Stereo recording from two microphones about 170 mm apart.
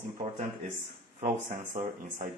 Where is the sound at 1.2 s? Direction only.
45° right (ahead or behind).